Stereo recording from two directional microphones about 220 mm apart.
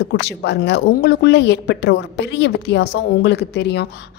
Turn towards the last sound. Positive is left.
turn(degrees=50)  # may be behind; listen again after turning